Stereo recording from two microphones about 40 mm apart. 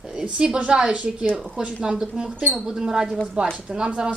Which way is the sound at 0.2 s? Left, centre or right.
Right.